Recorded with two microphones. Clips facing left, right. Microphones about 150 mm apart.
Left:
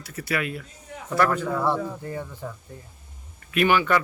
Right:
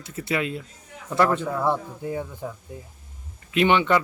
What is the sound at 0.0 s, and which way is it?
A man's voice, 25° right (ahead or behind).